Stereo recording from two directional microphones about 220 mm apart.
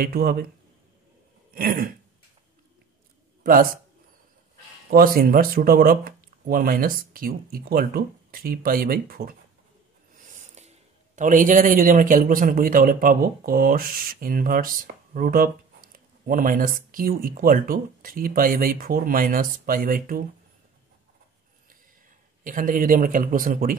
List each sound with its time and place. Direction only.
0.0 s speech: 45° right (ahead or behind)
1.5 s throat clearing: 40° right (ahead or behind)
3.4 s speech: 40° right (ahead or behind)
4.9 s a man's voice: 40° right (ahead or behind)
22.4 s speech: 40° right (ahead or behind)